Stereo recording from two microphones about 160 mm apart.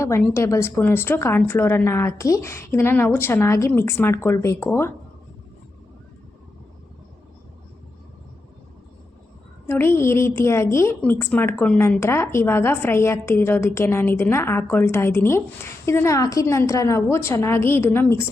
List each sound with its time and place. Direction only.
0.0 s a woman's voice: 20° left (ahead or behind)
9.6 s a woman's voice: 15° left (ahead or behind)